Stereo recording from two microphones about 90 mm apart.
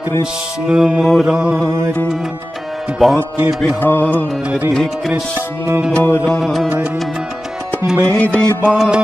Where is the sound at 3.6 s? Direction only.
20° left (ahead or behind).